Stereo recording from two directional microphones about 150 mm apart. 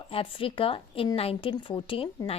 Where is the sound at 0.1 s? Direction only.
35° left (ahead or behind).